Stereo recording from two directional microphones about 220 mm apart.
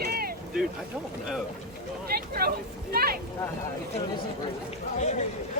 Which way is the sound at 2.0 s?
45° right (ahead or behind).